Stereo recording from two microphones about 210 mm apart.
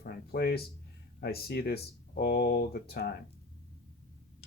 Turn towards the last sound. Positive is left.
turn(degrees=50)  # may be behind; listen again after turning